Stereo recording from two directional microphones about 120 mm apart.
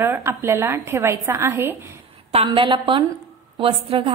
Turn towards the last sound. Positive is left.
turn(degrees=-50)  # may be behind; listen again after turning